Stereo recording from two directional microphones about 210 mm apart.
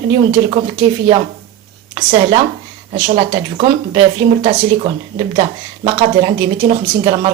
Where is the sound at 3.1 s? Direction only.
25° right (ahead or behind).